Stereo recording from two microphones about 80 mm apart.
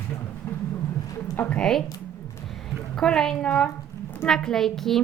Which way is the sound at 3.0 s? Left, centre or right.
Centre.